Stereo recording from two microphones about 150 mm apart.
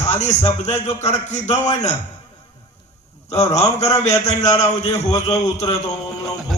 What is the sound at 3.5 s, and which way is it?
A man's voice, 45° left (ahead or behind).